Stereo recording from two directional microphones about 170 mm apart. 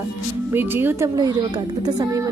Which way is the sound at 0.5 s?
10° right (ahead or behind).